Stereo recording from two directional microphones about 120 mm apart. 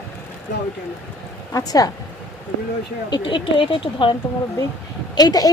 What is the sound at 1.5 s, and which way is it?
Speech, 30° left (ahead or behind).